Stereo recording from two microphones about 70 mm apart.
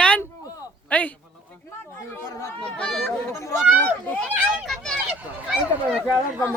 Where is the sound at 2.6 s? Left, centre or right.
Centre.